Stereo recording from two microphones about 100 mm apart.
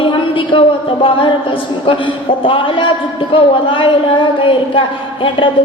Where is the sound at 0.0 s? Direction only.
60° left (ahead or behind).